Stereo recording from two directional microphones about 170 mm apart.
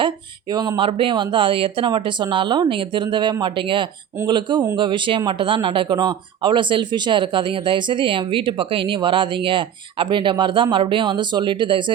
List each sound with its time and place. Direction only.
0.0 s speech: 25° right (ahead or behind)